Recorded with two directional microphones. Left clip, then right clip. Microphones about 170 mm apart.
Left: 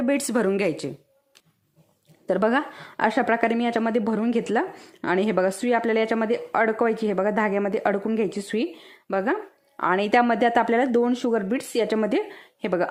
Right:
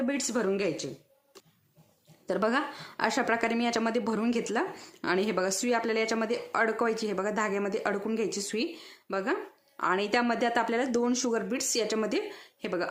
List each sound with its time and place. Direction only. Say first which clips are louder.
0.0 s speech: left 7 dB; 45° left (ahead or behind)
2.2 s a woman's voice: left 6 dB; 30° left (ahead or behind)